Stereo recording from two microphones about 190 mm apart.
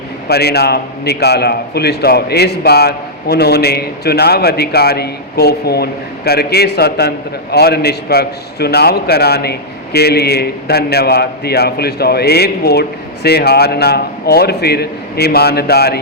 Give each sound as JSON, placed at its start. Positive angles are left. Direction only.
{"t": 0.3, "sound": "a man's voice", "side_deg": 60}